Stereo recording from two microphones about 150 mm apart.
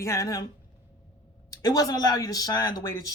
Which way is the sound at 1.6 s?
25° left (ahead or behind).